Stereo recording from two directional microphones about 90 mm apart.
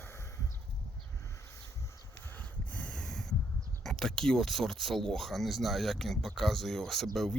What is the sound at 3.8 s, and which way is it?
Speech, 5° left (ahead or behind).